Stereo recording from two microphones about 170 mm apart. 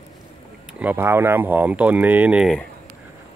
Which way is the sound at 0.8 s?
10° right (ahead or behind).